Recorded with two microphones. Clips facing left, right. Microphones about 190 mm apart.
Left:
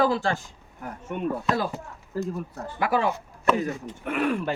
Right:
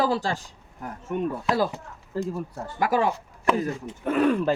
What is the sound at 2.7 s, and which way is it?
Speech, 40° right (ahead or behind).